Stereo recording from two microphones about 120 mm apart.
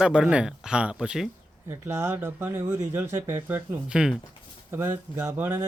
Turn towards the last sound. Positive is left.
turn(degrees=-15)  # may be behind; listen again after turning